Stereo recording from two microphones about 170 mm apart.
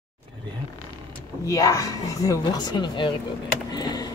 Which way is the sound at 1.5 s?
20° left (ahead or behind).